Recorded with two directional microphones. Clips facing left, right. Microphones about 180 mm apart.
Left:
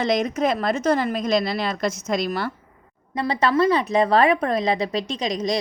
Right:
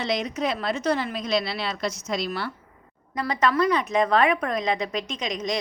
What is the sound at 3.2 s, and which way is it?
Speech, 30° left (ahead or behind).